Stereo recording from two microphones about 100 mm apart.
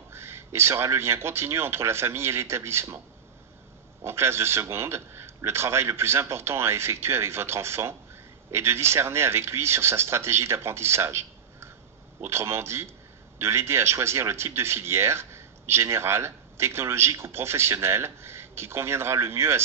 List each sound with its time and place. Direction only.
0.1 s speech: 25° right (ahead or behind)
4.0 s speech: 25° right (ahead or behind)